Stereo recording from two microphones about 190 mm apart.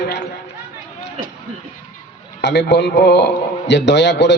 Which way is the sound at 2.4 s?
65° left (ahead or behind).